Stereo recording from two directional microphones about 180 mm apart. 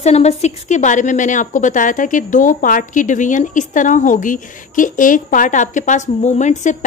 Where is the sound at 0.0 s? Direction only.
35° left (ahead or behind).